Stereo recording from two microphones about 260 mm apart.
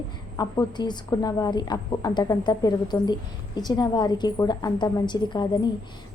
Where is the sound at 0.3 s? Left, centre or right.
Centre.